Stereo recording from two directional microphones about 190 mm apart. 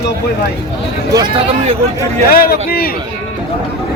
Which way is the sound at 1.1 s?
25° right (ahead or behind).